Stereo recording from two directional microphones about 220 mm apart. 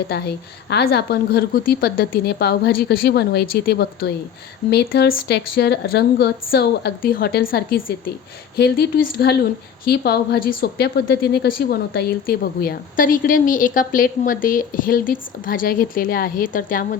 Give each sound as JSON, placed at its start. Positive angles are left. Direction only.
{"t": 0.1, "sound": "a woman's voice", "side_deg": 50}